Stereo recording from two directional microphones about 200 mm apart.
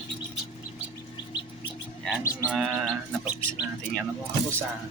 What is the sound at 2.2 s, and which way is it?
Livestock, 15° left (ahead or behind).